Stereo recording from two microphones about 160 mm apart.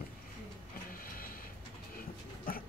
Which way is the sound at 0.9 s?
65° left (ahead or behind).